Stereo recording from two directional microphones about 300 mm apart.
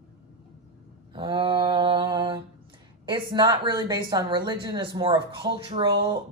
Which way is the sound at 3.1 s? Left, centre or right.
Centre.